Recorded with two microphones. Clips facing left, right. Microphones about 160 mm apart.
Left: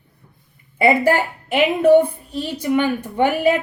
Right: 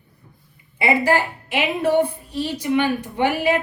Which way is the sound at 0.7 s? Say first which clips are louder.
Left 3 dB; 50° left (ahead or behind).